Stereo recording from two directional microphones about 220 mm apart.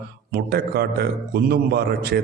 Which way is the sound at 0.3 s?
45° right (ahead or behind).